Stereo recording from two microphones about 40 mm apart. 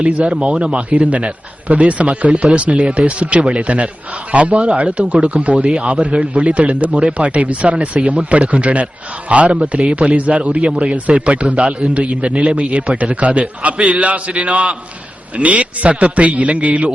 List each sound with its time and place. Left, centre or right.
0.0 s a man's voice: right